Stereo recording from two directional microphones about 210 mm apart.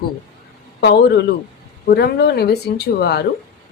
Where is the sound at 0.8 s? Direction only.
55° left (ahead or behind).